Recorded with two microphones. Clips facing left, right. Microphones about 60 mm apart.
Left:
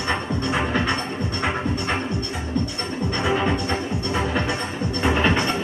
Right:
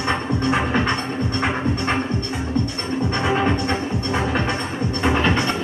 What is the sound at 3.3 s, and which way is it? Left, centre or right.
Music, right.